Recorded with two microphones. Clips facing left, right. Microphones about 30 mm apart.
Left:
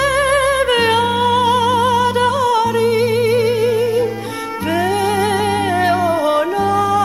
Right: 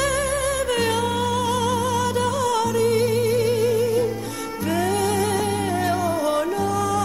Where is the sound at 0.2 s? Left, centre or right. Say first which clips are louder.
Left 9 dB; left.